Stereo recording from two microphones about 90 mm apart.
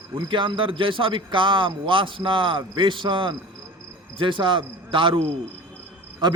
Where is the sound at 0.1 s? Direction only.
60° right (ahead or behind).